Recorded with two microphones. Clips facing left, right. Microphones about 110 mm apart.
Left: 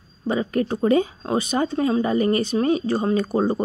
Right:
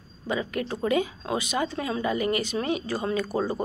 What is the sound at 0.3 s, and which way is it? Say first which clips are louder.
Speech: left 6 dB; 35° left (ahead or behind).